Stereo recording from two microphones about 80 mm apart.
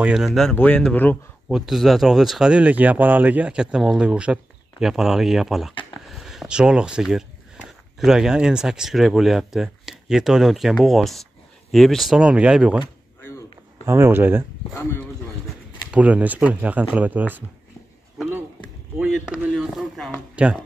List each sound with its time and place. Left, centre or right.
0.0 s speech: centre
0.6 s speech: centre
1.5 s speech: centre
2.5 s speech: centre
12.2 s speech: centre
13.8 s speech: right
14.8 s speech: left
15.9 s speech: centre
18.2 s a sound: centre
19.6 s speech: centre
20.4 s speech: centre